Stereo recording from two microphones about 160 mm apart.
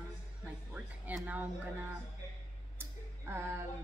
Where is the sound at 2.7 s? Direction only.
15° right (ahead or behind).